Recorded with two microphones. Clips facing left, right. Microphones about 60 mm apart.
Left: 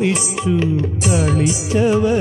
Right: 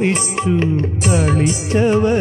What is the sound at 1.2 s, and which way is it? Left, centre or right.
Music, right.